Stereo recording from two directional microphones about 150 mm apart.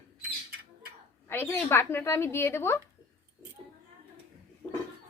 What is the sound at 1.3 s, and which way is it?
A woman's voice, 15° left (ahead or behind).